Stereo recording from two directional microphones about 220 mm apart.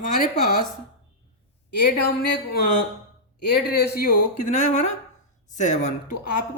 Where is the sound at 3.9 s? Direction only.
40° left (ahead or behind).